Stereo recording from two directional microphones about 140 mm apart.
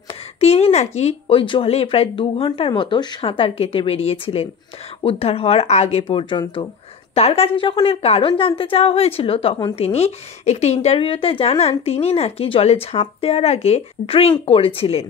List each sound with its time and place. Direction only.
0.1 s a woman's voice: 45° left (ahead or behind)